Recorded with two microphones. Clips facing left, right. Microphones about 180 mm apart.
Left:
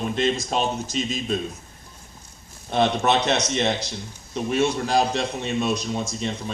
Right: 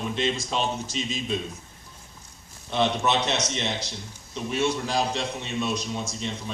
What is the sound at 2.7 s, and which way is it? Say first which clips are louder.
A man's voice: left 4 dB; 50° left (ahead or behind).